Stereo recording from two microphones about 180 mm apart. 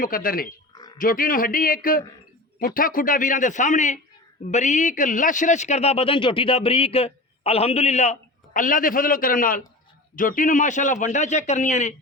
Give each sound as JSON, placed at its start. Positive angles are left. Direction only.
{"t": 0.0, "sound": "a man's voice", "side_deg": 50}
{"t": 0.7, "sound": "a sound", "side_deg": 20}
{"t": 0.9, "sound": "a man's voice", "side_deg": 50}